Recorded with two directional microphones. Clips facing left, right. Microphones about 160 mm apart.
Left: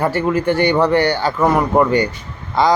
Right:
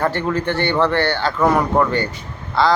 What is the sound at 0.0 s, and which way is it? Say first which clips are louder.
Speech: left 3 dB; 10° left (ahead or behind).